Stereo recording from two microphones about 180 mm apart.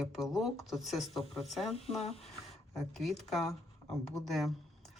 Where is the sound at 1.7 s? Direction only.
35° left (ahead or behind).